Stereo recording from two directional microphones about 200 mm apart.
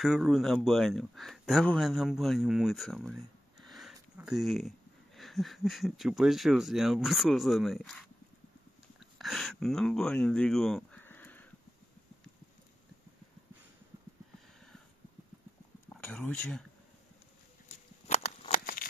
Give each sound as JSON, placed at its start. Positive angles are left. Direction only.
{"t": 0.0, "sound": "speech", "side_deg": 0}
{"t": 9.2, "sound": "speech", "side_deg": 0}
{"t": 16.0, "sound": "speech", "side_deg": 5}
{"t": 18.0, "sound": "shuffling cards", "side_deg": 30}